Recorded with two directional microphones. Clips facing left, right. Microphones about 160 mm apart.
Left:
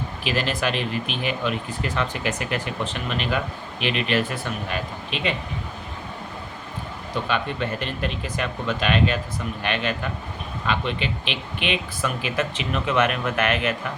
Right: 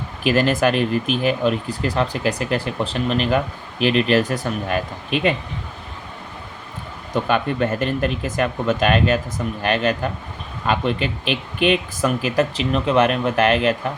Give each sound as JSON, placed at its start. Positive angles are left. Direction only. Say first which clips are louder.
{"t": 0.3, "sound": "speech", "louder": "right 8 dB", "side_deg": -45}
{"t": 7.3, "sound": "speech", "louder": "right 6 dB", "side_deg": -45}